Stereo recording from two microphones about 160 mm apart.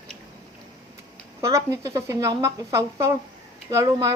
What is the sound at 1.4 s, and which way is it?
A woman's voice, 20° right (ahead or behind).